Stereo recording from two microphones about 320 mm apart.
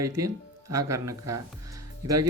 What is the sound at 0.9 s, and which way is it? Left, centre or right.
Speech, centre.